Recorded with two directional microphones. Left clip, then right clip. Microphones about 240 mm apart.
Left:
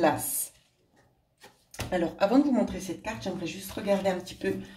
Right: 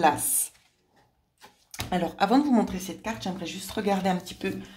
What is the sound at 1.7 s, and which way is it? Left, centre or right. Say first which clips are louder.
Speech: even; right.